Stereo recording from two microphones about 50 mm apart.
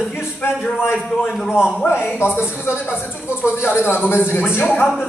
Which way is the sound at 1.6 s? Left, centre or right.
Centre.